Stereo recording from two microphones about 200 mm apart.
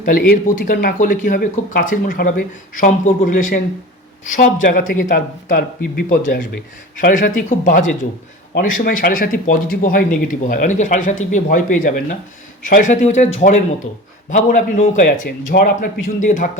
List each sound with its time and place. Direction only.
0.3 s a man's voice: 45° left (ahead or behind)
14.3 s a man's voice: 40° left (ahead or behind)